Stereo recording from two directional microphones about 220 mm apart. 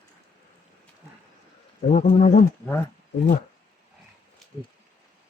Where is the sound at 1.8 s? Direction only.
30° left (ahead or behind).